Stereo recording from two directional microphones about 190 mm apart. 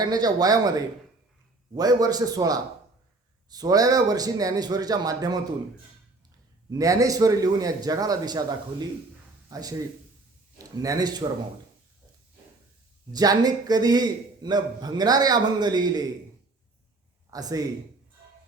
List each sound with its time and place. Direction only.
0.0 s a man's voice: 20° right (ahead or behind)
6.7 s a man's voice: 20° right (ahead or behind)
13.1 s a man's voice: 20° right (ahead or behind)
17.3 s a man's voice: 20° right (ahead or behind)